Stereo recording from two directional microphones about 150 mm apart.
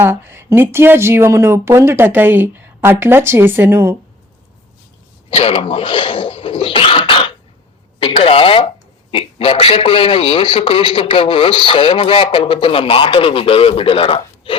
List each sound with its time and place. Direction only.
0.0 s speech: 15° right (ahead or behind)
5.3 s a man's voice: 40° left (ahead or behind)